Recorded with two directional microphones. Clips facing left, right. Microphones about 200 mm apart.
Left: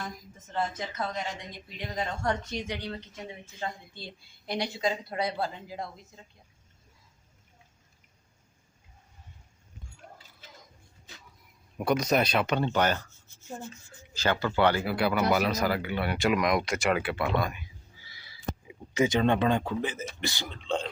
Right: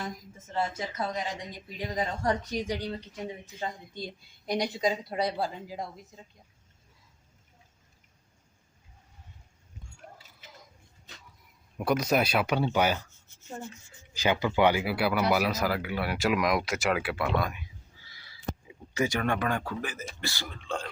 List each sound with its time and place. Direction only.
0.5 s a woman's voice: 10° right (ahead or behind)
1.5 s speech: 35° right (ahead or behind)
2.8 s a woman's voice: 10° right (ahead or behind)
11.8 s a woman's voice: 5° right (ahead or behind)
14.1 s speech: 15° right (ahead or behind)
18.1 s a sound: 10° left (ahead or behind)
20.2 s a man's voice: 20° left (ahead or behind)